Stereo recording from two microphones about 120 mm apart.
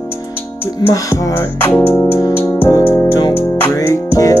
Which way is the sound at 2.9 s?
30° left (ahead or behind).